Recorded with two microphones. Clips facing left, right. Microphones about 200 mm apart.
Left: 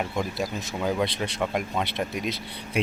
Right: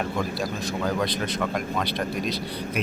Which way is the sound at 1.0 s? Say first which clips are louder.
Right 1 dB; 25° left (ahead or behind).